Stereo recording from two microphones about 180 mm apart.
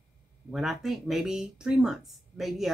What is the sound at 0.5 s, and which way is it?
Speech, centre (ahead or behind).